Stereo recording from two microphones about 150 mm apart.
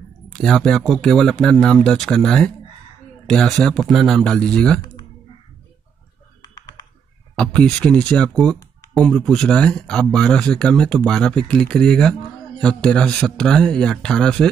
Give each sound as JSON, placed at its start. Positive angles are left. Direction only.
{"t": 0.3, "sound": "speech", "side_deg": 0}
{"t": 6.4, "sound": "computer keyboard", "side_deg": 30}
{"t": 7.3, "sound": "speech", "side_deg": 5}